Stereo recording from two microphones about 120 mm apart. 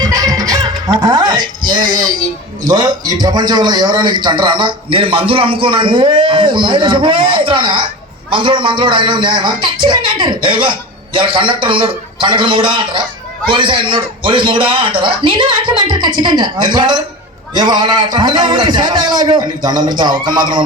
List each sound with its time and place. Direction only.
0.0 s music: 30° right (ahead or behind)
0.9 s a man's voice: 35° right (ahead or behind)